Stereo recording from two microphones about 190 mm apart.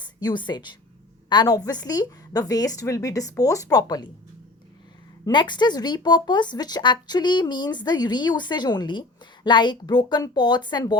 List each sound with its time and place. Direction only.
0.0 s a woman's voice: 20° left (ahead or behind)
5.2 s speech: 25° left (ahead or behind)